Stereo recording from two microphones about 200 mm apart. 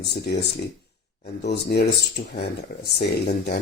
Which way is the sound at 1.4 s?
55° left (ahead or behind).